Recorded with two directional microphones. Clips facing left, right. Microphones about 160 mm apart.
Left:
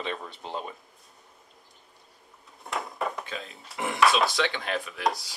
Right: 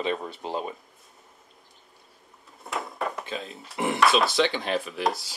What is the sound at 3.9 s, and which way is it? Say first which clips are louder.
Speech: right 1 dB; centre (ahead or behind).